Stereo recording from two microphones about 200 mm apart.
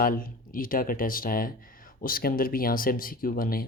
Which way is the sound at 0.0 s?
45° left (ahead or behind).